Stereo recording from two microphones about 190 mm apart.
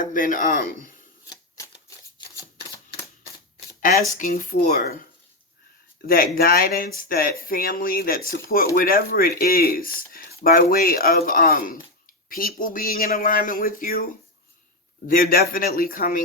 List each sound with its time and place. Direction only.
0.0 s speech: 45° left (ahead or behind)
2.2 s shuffling cards: 25° left (ahead or behind)
4.1 s speech: 45° left (ahead or behind)
6.1 s speech: 50° left (ahead or behind)